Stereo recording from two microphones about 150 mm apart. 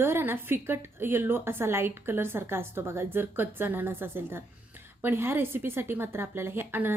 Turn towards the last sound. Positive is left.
turn(degrees=-15)  # may be behind; listen again after turning